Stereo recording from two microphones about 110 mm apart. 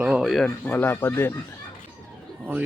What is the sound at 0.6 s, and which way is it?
Speech, 15° left (ahead or behind).